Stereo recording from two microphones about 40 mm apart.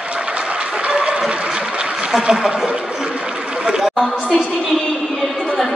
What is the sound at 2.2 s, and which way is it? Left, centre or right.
Speech, centre.